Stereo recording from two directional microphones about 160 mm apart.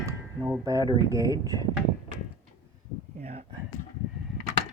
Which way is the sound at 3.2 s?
40° right (ahead or behind).